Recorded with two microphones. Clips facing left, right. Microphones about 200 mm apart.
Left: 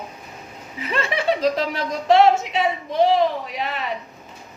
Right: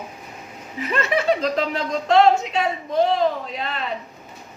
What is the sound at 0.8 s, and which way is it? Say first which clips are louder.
Speech: right 3 dB; 45° right (ahead or behind).